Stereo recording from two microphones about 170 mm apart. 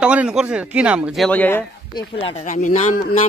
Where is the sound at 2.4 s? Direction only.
50° left (ahead or behind).